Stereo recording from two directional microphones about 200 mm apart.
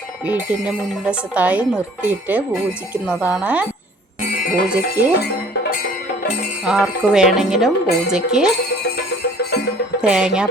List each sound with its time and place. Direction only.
0.3 s speech: 5° right (ahead or behind)
4.7 s speech: 10° right (ahead or behind)
6.7 s speech: 5° right (ahead or behind)
10.0 s speech: 5° right (ahead or behind)